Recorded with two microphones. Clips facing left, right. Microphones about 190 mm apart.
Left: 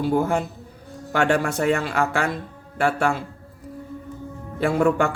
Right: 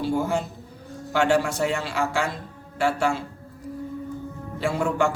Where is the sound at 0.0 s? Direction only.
55° left (ahead or behind).